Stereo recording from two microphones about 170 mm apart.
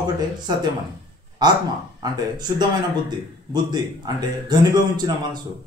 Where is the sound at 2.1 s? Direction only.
25° right (ahead or behind).